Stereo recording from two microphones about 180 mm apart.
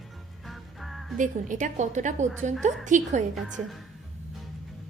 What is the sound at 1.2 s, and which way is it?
A woman's voice, 45° right (ahead or behind).